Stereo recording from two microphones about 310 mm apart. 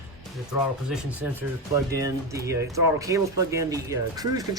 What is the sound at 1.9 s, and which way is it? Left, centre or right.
Speech, centre.